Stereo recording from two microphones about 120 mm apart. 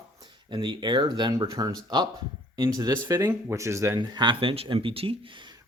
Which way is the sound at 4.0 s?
40° right (ahead or behind).